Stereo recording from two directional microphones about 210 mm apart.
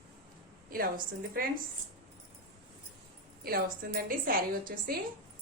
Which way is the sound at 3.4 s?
45° right (ahead or behind).